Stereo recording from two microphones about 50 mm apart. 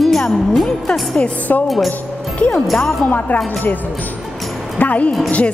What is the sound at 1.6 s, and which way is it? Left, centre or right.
Speech, centre.